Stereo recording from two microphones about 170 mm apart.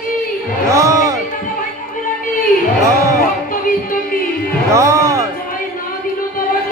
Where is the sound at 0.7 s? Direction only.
20° right (ahead or behind).